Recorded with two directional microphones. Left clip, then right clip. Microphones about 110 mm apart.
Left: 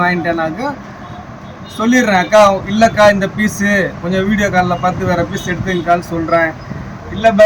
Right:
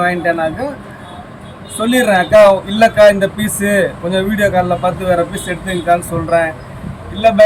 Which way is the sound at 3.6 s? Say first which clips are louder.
Right 3 dB; 15° right (ahead or behind).